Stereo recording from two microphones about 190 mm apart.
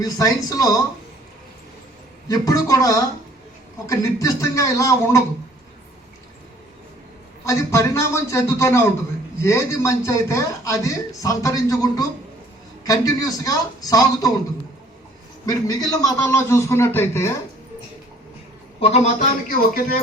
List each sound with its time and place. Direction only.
0.0 s a man's voice: 20° left (ahead or behind)
2.2 s a man's voice: 20° left (ahead or behind)
7.4 s a man's voice: 15° left (ahead or behind)
15.4 s a man's voice: 20° left (ahead or behind)
18.8 s a man's voice: 30° left (ahead or behind)
19.5 s speech: 50° left (ahead or behind)